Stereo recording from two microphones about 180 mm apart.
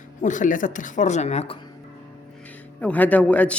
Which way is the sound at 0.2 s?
45° left (ahead or behind).